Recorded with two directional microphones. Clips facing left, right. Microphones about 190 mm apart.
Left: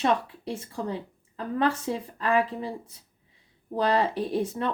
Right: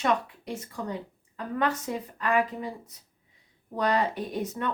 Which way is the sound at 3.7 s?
30° left (ahead or behind).